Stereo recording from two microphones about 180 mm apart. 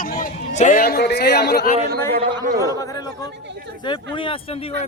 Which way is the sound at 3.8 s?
30° left (ahead or behind).